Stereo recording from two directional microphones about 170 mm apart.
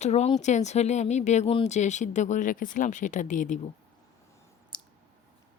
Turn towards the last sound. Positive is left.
turn(degrees=25)  # may be behind; listen again after turning